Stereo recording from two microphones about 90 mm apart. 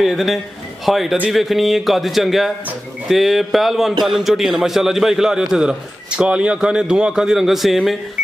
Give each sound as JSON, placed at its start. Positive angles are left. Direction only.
{"t": 0.0, "sound": "a man's voice", "side_deg": 0}